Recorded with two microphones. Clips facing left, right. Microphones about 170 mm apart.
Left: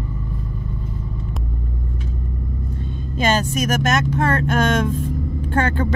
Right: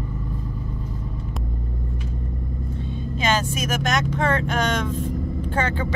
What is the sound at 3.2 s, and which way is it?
Speech, 45° left (ahead or behind).